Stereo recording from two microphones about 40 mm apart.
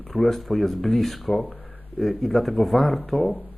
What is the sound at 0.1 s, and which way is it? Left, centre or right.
Speech, centre.